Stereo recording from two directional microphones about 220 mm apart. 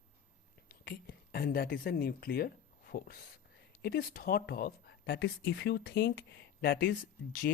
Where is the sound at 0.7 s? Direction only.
45° left (ahead or behind).